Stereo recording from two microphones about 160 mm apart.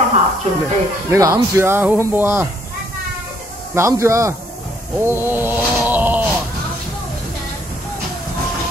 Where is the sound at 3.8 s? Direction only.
20° right (ahead or behind).